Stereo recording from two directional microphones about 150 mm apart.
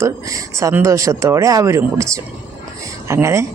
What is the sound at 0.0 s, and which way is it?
Speech, 20° right (ahead or behind).